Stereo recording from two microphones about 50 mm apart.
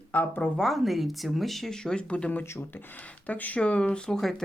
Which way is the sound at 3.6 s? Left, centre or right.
Left.